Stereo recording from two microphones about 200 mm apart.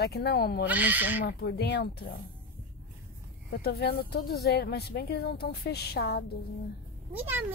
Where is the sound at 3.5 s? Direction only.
50° left (ahead or behind).